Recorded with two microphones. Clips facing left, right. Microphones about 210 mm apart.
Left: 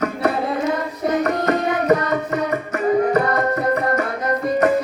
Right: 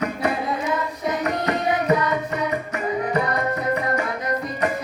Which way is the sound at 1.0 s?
50° left (ahead or behind).